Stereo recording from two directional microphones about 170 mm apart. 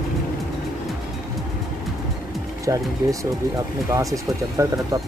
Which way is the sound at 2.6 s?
20° right (ahead or behind).